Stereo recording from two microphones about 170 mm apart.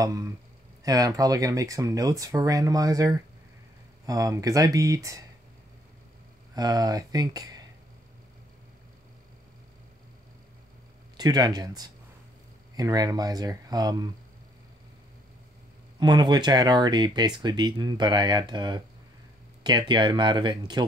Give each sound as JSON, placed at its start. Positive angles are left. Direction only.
{"t": 0.0, "sound": "speech", "side_deg": -20}
{"t": 6.5, "sound": "speech", "side_deg": -20}
{"t": 11.1, "sound": "speech", "side_deg": -25}
{"t": 16.0, "sound": "speech", "side_deg": -25}